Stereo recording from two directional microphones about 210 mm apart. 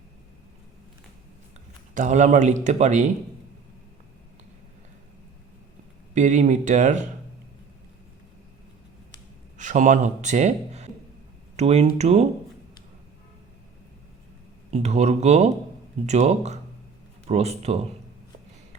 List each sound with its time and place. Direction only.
2.0 s a man's voice: 35° right (ahead or behind)
6.1 s a man's voice: 35° right (ahead or behind)
9.6 s a man's voice: 35° right (ahead or behind)
14.7 s a man's voice: 30° right (ahead or behind)